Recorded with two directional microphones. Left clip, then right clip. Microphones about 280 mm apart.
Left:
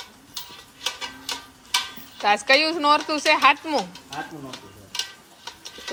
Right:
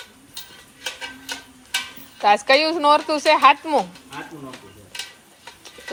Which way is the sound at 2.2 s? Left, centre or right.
Centre.